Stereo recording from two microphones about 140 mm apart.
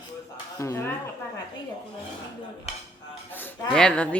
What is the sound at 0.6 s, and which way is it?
Speech, 20° left (ahead or behind).